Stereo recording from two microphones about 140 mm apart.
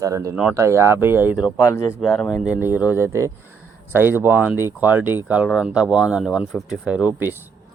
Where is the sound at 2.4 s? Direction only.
10° right (ahead or behind).